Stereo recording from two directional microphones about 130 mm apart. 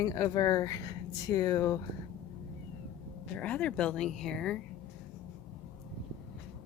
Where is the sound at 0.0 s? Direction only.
25° left (ahead or behind).